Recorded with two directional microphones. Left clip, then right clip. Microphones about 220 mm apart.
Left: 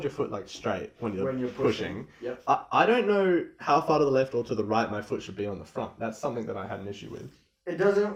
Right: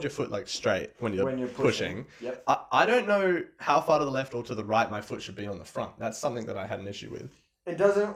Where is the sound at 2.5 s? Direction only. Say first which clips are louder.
Even; 45° right (ahead or behind).